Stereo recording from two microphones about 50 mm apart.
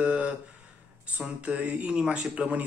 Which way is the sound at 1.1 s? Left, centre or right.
Right.